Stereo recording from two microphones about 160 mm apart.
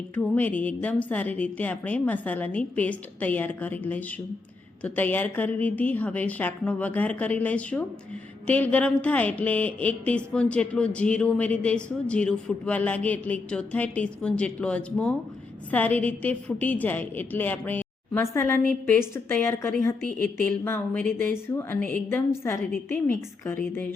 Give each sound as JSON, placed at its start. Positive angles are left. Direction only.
{"t": 0.1, "sound": "speech", "side_deg": 10}